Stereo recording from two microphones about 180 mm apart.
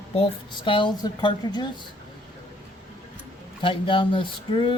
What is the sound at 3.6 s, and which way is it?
Speech, 30° left (ahead or behind).